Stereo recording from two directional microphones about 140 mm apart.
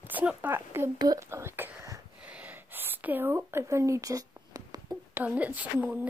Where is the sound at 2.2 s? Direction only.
10° right (ahead or behind); by 5.0 s 25° right (ahead or behind).